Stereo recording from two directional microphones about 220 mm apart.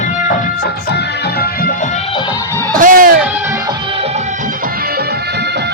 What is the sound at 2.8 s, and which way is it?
Music, 40° right (ahead or behind).